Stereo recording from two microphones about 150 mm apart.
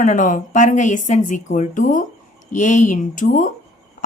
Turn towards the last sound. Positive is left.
turn(degrees=55)  # may be behind; listen again after turning